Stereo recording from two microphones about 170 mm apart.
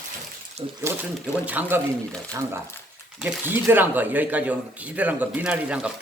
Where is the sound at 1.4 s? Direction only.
10° right (ahead or behind).